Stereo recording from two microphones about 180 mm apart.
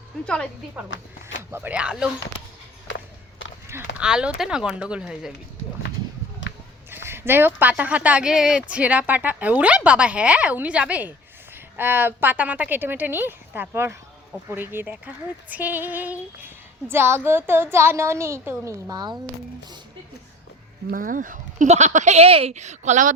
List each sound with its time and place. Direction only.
1.5 s speech: 10° right (ahead or behind)
3.7 s speech: 10° right (ahead or behind)
6.9 s speech: 15° right (ahead or behind)
20.9 s speech: 50° right (ahead or behind)